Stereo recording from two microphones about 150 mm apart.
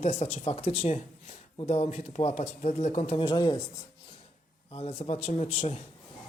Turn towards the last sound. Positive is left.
turn(degrees=45)  # may be behind; listen again after turning